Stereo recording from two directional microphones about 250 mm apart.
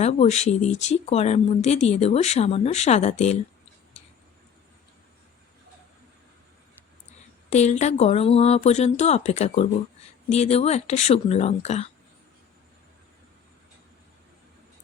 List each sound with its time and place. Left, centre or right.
0.0 s speech: left
7.5 s speech: left